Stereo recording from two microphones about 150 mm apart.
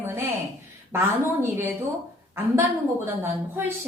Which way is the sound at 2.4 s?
20° right (ahead or behind).